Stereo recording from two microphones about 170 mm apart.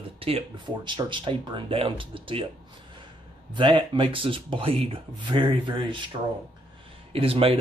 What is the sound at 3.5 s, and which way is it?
Speech, 30° right (ahead or behind).